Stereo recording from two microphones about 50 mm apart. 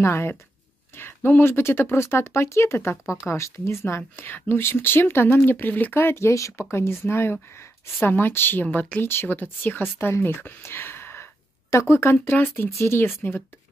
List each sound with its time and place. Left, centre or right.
0.0 s speech: left
0.9 s a sound: left
1.4 s speech: left
5.9 s speech: left
6.7 s speech: left
11.7 s speech: left
12.3 s speech: left